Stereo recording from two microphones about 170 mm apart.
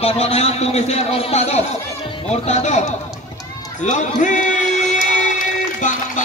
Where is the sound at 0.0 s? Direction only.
35° left (ahead or behind).